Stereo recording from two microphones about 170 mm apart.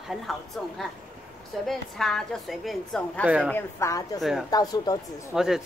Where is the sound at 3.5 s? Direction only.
15° left (ahead or behind).